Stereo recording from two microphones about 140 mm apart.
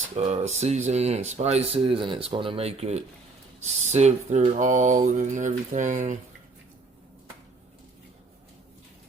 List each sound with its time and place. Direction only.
0.1 s speech: 45° right (ahead or behind)